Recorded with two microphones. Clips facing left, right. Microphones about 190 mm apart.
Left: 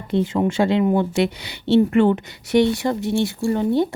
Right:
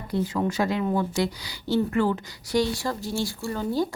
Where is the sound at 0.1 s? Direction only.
25° left (ahead or behind).